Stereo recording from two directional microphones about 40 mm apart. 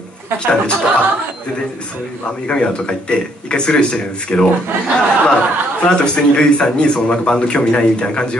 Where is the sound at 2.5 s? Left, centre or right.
Left.